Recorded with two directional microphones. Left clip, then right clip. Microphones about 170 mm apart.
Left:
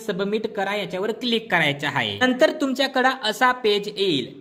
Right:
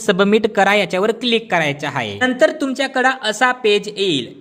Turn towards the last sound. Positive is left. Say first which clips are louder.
# right 4 dB
turn(degrees=-15)  # may be behind; listen again after turning